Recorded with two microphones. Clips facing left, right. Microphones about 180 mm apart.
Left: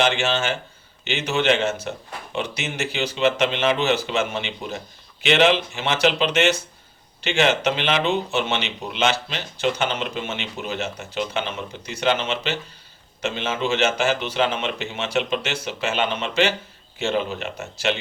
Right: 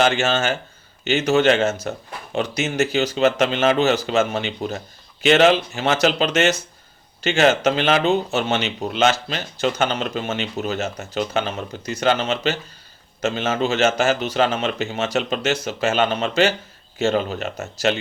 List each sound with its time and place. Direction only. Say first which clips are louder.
0.0 s speech: right 3 dB; 45° right (ahead or behind)